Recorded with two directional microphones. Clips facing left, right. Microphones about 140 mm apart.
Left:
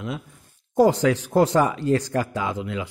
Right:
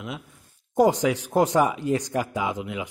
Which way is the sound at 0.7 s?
15° right (ahead or behind).